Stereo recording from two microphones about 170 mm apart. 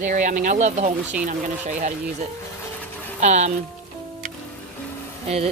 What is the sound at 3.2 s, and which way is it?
Speech, 45° right (ahead or behind).